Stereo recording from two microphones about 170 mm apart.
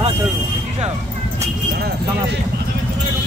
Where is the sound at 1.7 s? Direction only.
70° right (ahead or behind).